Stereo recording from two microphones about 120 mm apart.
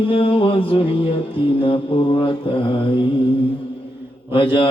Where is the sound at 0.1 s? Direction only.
45° left (ahead or behind).